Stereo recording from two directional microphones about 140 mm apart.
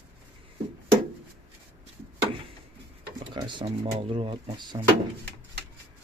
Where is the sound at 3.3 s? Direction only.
35° right (ahead or behind).